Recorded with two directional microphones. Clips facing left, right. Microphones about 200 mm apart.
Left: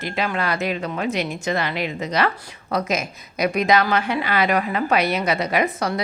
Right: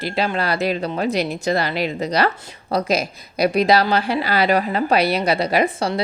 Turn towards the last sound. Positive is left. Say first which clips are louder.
# right 2 dB
turn(degrees=-30)  # may be behind; listen again after turning